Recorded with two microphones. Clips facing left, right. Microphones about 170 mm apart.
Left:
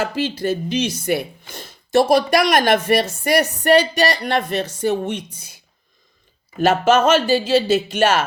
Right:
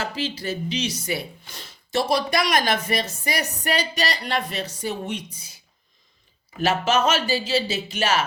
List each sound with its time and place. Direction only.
0.0 s speech: 50° left (ahead or behind)
6.6 s speech: 50° left (ahead or behind)